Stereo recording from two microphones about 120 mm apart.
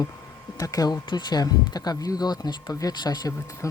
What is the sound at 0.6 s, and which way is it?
Speech, 30° left (ahead or behind).